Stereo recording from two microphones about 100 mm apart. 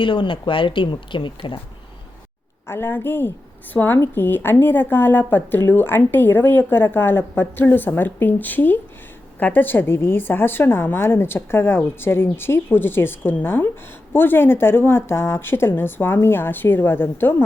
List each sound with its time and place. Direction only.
0.0 s speech: 55° left (ahead or behind)
2.6 s a woman's voice: 20° left (ahead or behind)